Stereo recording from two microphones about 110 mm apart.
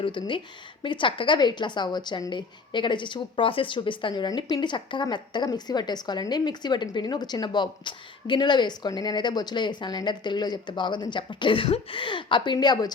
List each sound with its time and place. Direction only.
0.0 s a woman's voice: 45° left (ahead or behind)